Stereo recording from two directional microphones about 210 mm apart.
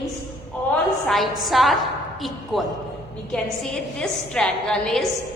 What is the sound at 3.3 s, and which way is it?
A woman's voice, 5° left (ahead or behind).